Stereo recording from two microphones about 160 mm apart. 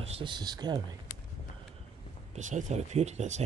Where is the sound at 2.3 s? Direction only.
45° right (ahead or behind).